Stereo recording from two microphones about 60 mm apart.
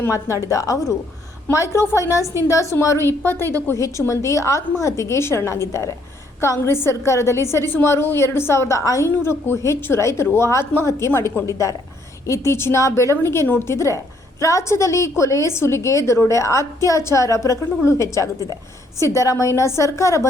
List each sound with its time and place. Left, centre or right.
0.1 s a woman's voice: left
1.5 s speech: left
2.0 s a woman's voice: left
3.8 s a woman's voice: left
9.2 s speech: left
11.4 s a woman's voice: left